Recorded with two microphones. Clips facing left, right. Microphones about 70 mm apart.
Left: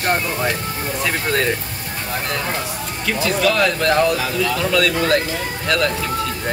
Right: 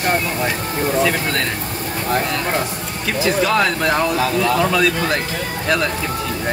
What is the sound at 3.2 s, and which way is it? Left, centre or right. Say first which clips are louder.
Speech: right 1 dB; right.